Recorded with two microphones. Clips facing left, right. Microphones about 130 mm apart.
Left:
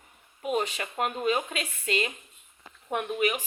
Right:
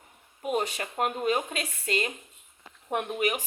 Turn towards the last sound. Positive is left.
turn(degrees=-35)  # may be behind; listen again after turning